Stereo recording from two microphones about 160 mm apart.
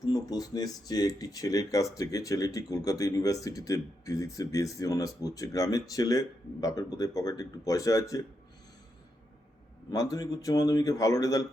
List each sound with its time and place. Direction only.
0.1 s speech: 25° left (ahead or behind)
9.9 s speech: 20° left (ahead or behind)